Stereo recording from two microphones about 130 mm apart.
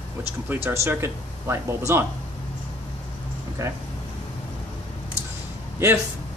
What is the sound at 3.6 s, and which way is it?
Speech, 20° right (ahead or behind).